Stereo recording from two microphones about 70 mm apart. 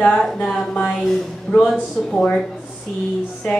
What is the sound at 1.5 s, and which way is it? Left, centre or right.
Speech, centre.